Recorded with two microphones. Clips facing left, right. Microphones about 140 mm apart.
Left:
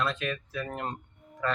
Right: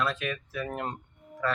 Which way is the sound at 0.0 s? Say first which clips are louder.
Even; 5° right (ahead or behind).